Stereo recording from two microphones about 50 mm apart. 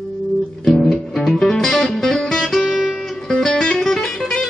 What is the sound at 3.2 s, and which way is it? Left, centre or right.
Music, centre.